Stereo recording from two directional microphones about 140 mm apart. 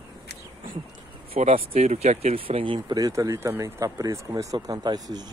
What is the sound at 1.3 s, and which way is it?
Speech, 45° right (ahead or behind).